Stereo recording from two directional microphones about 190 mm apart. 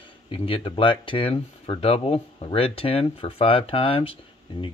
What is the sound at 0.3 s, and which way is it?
Speech, 30° left (ahead or behind).